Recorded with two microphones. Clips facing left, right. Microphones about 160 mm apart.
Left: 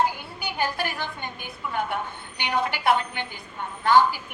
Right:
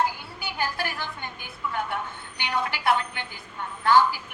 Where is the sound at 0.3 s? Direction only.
20° left (ahead or behind).